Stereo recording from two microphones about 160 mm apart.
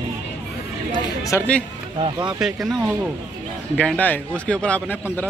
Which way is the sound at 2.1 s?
30° right (ahead or behind).